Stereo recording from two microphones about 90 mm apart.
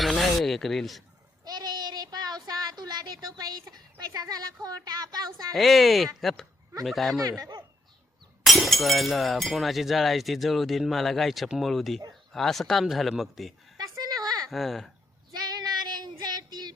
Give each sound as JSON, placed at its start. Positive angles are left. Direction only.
{"t": 0.0, "sound": "a sound", "side_deg": 0}
{"t": 1.5, "sound": "child singing", "side_deg": -50}
{"t": 3.7, "sound": "a sound", "side_deg": -45}
{"t": 5.5, "sound": "speech", "side_deg": 0}
{"t": 7.3, "sound": "speech", "side_deg": -45}
{"t": 8.4, "sound": "speech", "side_deg": 0}
{"t": 13.7, "sound": "a sound", "side_deg": -45}
{"t": 14.5, "sound": "speech", "side_deg": 0}
{"t": 15.3, "sound": "child singing", "side_deg": -50}